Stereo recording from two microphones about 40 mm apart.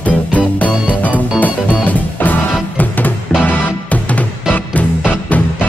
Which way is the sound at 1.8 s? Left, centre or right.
Left.